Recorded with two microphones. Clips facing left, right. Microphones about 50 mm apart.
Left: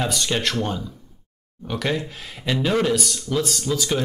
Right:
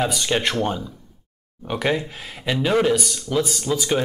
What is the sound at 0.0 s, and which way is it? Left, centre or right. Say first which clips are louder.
Speech: right 2 dB; centre.